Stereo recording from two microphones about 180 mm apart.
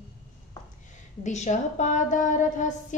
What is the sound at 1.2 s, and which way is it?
A woman's voice, 40° left (ahead or behind).